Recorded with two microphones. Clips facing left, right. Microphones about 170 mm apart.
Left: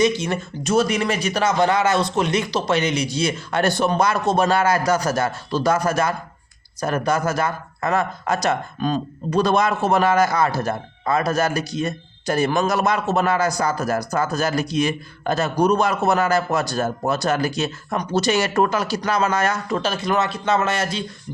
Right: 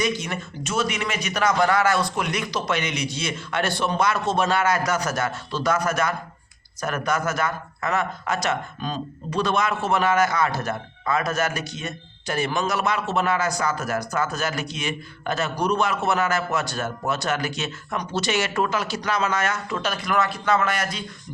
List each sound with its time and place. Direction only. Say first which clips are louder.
0.0 s speech: left 6 dB; 30° left (ahead or behind)